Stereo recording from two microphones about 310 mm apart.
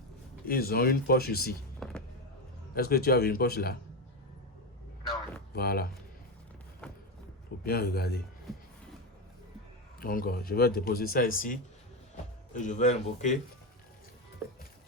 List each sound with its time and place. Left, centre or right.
0.4 s speech: left
1.8 s music: centre
2.7 s speech: left
5.5 s speech: left
6.8 s a sound: centre
7.6 s speech: left
10.0 s speech: left
12.5 s speech: left